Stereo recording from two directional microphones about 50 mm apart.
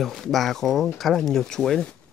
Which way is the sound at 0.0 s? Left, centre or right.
Centre.